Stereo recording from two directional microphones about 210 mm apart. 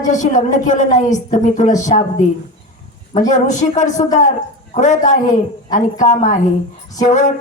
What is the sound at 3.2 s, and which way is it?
A man's voice, 35° left (ahead or behind).